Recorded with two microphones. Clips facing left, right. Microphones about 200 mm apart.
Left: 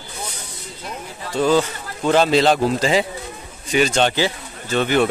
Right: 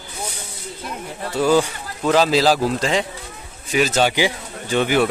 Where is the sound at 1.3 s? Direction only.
10° right (ahead or behind).